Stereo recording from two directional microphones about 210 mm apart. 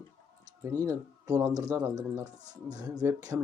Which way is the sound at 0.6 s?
15° right (ahead or behind).